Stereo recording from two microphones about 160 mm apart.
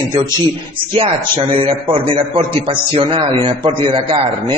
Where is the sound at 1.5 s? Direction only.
35° right (ahead or behind).